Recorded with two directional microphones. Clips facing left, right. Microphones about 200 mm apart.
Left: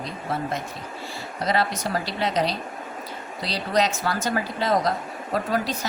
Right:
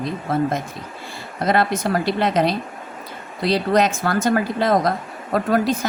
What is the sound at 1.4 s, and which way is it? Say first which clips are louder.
A woman's voice: right 5 dB; 55° right (ahead or behind).